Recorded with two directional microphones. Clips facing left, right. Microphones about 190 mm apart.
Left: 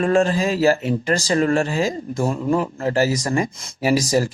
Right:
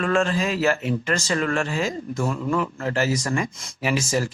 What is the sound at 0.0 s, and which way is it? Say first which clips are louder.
Speech: left 4 dB; 35° left (ahead or behind).